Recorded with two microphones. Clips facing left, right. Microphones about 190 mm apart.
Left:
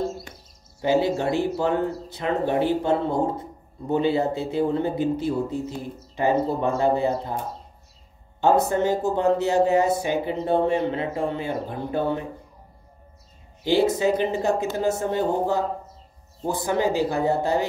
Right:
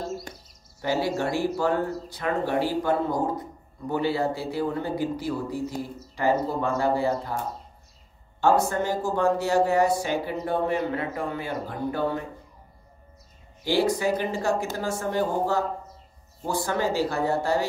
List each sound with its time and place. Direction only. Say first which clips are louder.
0.7 s speech: left 4 dB; 20° left (ahead or behind)
8.4 s speech: left 2 dB; 20° left (ahead or behind)
13.7 s speech: left 3 dB; 20° left (ahead or behind)